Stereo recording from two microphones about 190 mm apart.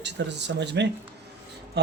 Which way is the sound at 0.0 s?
65° right (ahead or behind).